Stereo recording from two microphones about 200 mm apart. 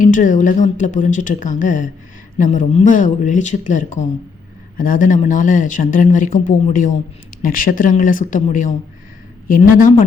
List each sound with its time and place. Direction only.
0.0 s speech: 40° left (ahead or behind)